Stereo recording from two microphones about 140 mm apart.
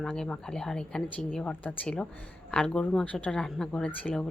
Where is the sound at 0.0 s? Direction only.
5° left (ahead or behind).